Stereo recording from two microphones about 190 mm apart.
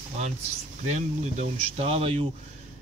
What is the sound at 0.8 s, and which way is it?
Speech, 40° right (ahead or behind).